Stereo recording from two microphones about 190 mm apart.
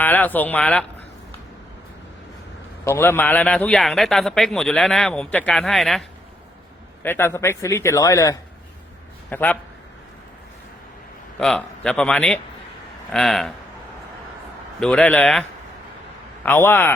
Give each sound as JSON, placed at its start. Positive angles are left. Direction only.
{"t": 0.0, "sound": "speech", "side_deg": 10}
{"t": 2.8, "sound": "a man's voice", "side_deg": 10}
{"t": 7.0, "sound": "speech", "side_deg": 10}
{"t": 11.3, "sound": "a man's voice", "side_deg": 5}
{"t": 14.8, "sound": "a man's voice", "side_deg": 5}